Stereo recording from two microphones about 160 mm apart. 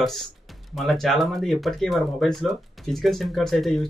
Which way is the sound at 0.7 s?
Centre (ahead or behind).